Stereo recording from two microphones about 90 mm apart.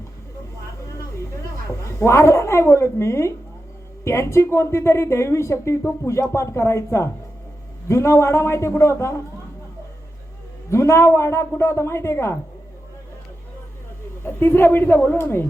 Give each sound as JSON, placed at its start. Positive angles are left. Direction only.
{"t": 2.0, "sound": "speech", "side_deg": 30}
{"t": 10.7, "sound": "speech", "side_deg": 30}
{"t": 14.3, "sound": "a woman's voice", "side_deg": 25}